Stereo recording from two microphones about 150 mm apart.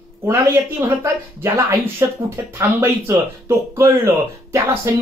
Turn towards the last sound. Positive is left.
turn(degrees=-15)  # may be behind; listen again after turning